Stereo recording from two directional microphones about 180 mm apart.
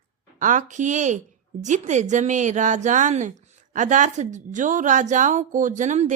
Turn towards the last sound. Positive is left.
turn(degrees=-40)  # may be behind; listen again after turning